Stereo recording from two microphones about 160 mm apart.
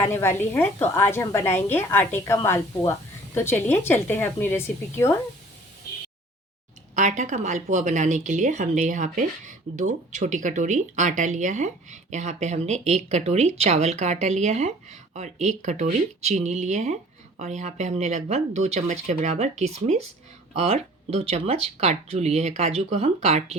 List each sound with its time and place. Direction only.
0.0 s a woman's voice: 15° left (ahead or behind)
6.9 s speech: 50° right (ahead or behind)